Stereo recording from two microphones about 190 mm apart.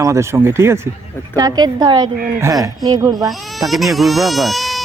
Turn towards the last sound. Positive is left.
turn(degrees=0)  # may be behind; listen again after turning